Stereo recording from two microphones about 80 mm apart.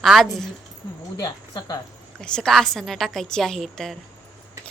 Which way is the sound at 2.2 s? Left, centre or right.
Centre.